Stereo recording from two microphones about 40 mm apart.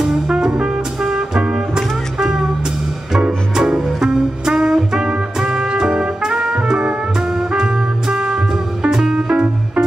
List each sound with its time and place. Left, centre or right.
0.3 s music: right
3.5 s music: centre